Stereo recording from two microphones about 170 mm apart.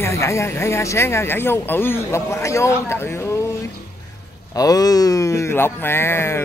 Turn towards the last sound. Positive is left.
turn(degrees=15)  # may be behind; listen again after turning